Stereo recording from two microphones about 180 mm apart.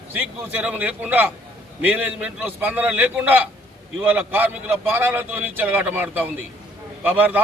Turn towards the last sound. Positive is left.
turn(degrees=-10)  # may be behind; listen again after turning